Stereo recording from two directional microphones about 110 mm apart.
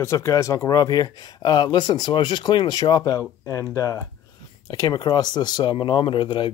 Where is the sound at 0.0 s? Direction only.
30° left (ahead or behind).